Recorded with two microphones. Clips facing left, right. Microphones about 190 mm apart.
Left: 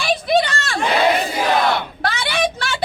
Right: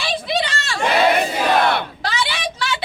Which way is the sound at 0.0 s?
50° left (ahead or behind).